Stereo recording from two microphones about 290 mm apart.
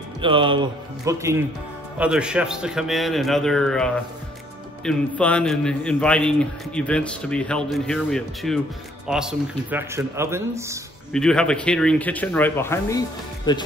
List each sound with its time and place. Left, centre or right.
0.2 s a man's voice: centre
11.1 s a man's voice: centre